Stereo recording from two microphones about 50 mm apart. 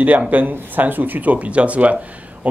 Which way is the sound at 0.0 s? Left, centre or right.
Right.